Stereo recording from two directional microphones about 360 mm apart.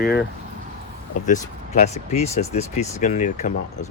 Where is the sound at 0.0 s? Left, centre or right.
Left.